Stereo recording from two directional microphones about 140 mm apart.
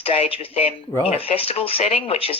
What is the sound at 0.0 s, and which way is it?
Speech, 45° left (ahead or behind).